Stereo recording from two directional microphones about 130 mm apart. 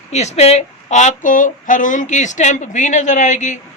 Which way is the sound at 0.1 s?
60° left (ahead or behind).